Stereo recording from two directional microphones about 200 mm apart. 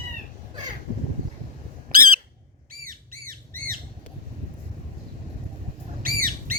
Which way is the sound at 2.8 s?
45° right (ahead or behind).